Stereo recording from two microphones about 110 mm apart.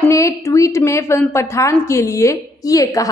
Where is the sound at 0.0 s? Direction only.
25° left (ahead or behind).